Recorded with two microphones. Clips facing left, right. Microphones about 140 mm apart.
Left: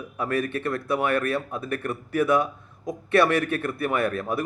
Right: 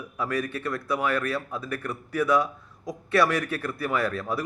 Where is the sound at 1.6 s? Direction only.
55° left (ahead or behind).